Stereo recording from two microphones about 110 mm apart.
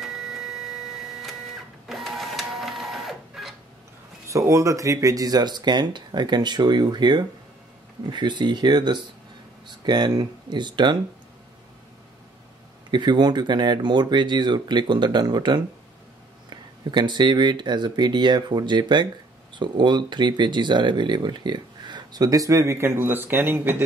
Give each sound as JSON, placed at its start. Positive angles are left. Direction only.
{"t": 0.0, "sound": "a sound", "side_deg": -5}
{"t": 1.9, "sound": "printer", "side_deg": 0}
{"t": 4.3, "sound": "speech", "side_deg": -30}
{"t": 12.9, "sound": "speech", "side_deg": -45}